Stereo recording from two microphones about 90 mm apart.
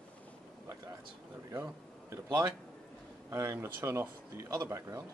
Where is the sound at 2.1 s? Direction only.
40° right (ahead or behind).